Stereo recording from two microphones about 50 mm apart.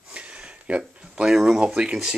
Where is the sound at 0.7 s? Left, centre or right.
Right.